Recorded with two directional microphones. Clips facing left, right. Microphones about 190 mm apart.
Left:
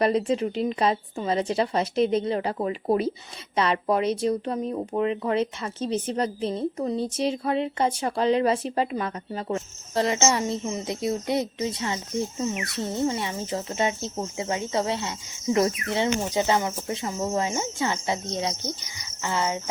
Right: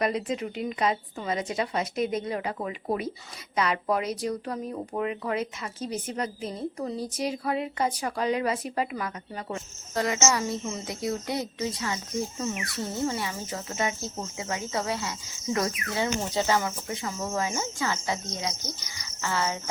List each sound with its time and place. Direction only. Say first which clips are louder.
0.0 s a woman's voice: left 5 dB; 30° left (ahead or behind)